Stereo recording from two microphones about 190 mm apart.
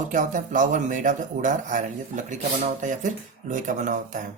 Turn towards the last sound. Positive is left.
turn(degrees=-40)  # may be behind; listen again after turning